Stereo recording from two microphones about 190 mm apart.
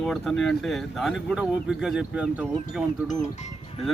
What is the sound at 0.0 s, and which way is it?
Speech, centre (ahead or behind).